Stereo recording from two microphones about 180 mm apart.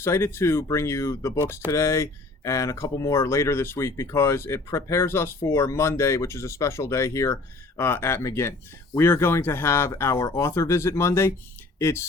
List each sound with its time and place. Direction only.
0.0 s speech: 15° left (ahead or behind)